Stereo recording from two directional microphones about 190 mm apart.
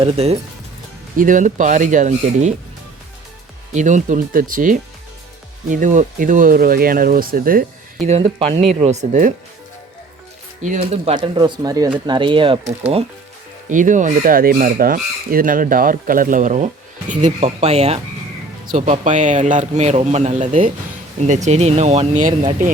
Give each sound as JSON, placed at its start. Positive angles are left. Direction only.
{"t": 0.0, "sound": "speech", "side_deg": -35}
{"t": 3.7, "sound": "speech", "side_deg": -40}
{"t": 8.2, "sound": "speech", "side_deg": -30}
{"t": 10.6, "sound": "speech", "side_deg": -40}